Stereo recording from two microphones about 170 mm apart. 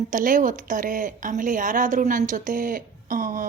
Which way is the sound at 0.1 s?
50° right (ahead or behind).